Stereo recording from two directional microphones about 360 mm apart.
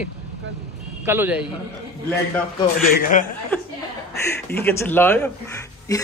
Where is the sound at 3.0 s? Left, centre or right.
Left.